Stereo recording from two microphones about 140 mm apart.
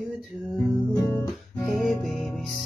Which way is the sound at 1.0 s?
20° left (ahead or behind).